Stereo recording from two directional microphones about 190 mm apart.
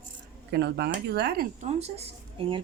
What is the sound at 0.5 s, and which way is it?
Speech, 60° right (ahead or behind).